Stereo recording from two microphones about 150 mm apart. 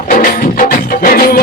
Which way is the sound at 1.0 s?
85° left.